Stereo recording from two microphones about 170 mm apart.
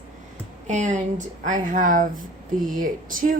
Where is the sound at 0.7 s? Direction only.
45° right (ahead or behind).